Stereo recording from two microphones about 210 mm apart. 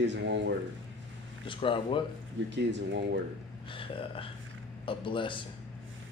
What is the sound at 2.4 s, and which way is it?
Speech, 60° right (ahead or behind).